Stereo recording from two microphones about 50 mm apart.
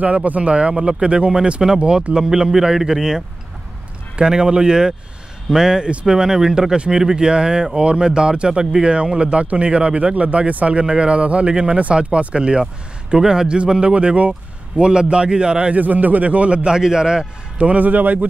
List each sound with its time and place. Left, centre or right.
0.0 s speech: right
15.7 s speech: right; by 17.3 s centre
17.6 s a man's voice: right